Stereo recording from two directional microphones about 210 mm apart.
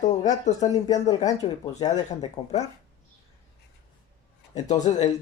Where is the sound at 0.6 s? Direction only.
15° left (ahead or behind).